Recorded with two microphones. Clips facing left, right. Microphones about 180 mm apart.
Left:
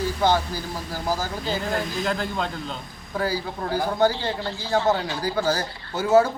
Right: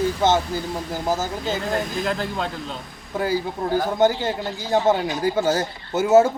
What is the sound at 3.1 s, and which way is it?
A man's voice, 20° right (ahead or behind).